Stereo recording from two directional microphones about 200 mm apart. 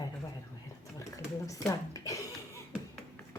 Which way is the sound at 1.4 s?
15° left (ahead or behind).